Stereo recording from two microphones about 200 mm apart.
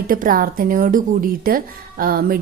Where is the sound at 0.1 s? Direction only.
45° right (ahead or behind).